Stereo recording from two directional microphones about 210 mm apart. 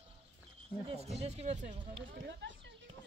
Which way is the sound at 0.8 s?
30° right (ahead or behind).